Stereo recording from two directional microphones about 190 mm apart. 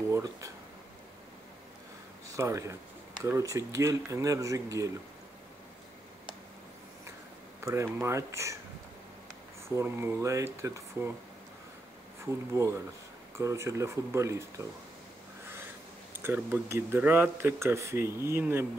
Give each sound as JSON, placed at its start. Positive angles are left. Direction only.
{"t": 0.1, "sound": "a sound", "side_deg": -15}
{"t": 2.2, "sound": "speech", "side_deg": -15}
{"t": 7.6, "sound": "speech", "side_deg": -15}
{"t": 9.8, "sound": "speech", "side_deg": -10}
{"t": 12.3, "sound": "speech", "side_deg": -15}
{"t": 16.2, "sound": "speech", "side_deg": -10}